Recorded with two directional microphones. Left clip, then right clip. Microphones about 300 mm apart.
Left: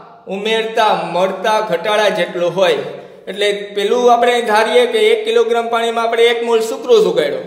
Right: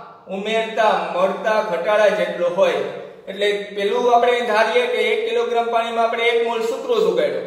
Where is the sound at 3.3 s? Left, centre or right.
Left.